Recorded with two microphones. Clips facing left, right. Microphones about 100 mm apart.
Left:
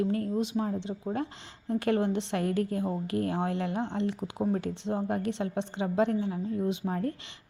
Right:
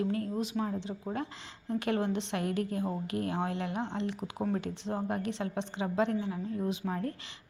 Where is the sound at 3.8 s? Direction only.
30° right (ahead or behind).